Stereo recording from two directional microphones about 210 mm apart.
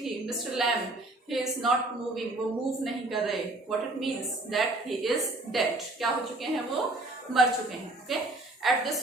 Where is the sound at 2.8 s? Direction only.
Centre (ahead or behind).